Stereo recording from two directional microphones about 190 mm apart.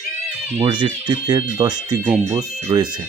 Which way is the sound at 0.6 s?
20° right (ahead or behind).